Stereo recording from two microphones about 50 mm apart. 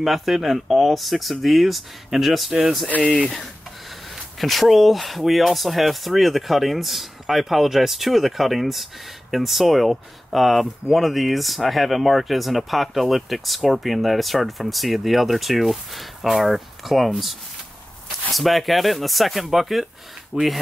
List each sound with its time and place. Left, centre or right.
0.0 s speech: centre
4.1 s speech: centre
18.3 s speech: centre